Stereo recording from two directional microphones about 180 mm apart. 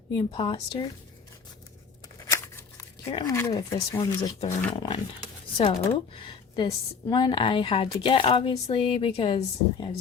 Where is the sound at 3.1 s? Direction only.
15° left (ahead or behind).